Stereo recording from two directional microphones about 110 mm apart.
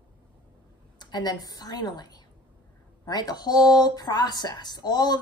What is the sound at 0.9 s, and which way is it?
A woman's voice, 40° left (ahead or behind).